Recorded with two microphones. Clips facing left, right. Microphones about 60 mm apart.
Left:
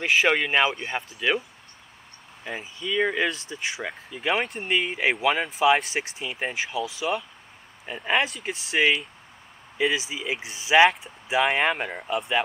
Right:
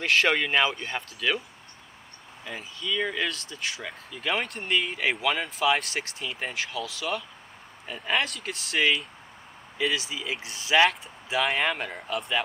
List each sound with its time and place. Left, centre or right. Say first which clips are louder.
0.0 s speech: left 2 dB; centre
2.5 s speech: left 2 dB; left